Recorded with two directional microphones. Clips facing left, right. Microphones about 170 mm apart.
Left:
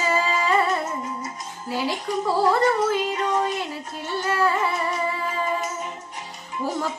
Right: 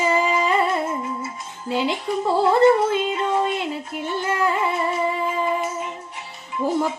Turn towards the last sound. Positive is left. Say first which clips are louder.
# right 5 dB
turn(degrees=-20)  # may be behind; listen again after turning